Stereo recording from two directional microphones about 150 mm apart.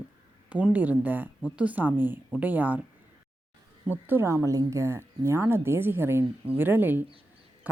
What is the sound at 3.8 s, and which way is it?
A woman's voice, 10° right (ahead or behind).